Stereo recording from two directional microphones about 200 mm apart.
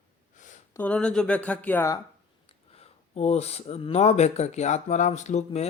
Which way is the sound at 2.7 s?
30° left (ahead or behind).